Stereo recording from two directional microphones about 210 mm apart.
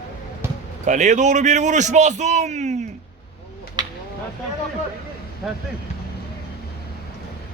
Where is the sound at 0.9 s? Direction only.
35° right (ahead or behind).